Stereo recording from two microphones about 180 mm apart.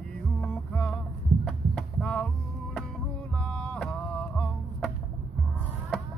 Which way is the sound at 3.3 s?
5° left (ahead or behind).